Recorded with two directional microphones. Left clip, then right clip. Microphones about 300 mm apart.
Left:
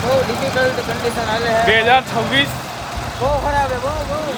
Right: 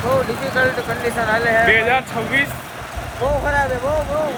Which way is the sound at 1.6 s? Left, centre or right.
Centre.